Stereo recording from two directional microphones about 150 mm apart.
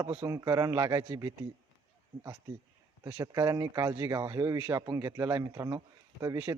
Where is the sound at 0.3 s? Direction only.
20° right (ahead or behind).